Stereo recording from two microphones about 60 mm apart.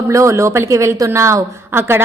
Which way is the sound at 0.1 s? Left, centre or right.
Right.